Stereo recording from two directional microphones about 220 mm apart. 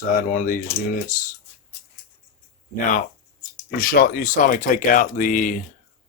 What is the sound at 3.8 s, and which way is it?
Speech, 40° left (ahead or behind).